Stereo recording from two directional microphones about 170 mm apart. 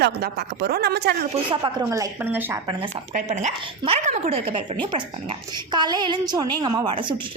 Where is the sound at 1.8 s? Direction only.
15° right (ahead or behind).